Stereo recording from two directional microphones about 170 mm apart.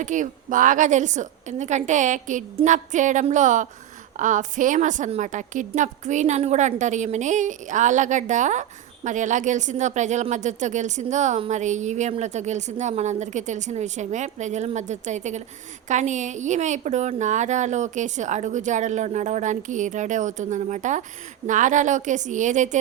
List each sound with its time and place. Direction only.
0.0 s speech: 45° right (ahead or behind)